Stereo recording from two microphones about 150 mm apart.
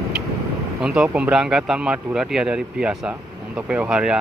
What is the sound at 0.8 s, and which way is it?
Speech, 5° right (ahead or behind).